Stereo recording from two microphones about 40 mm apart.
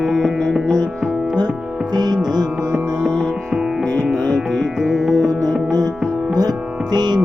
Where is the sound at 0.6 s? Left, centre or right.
Left.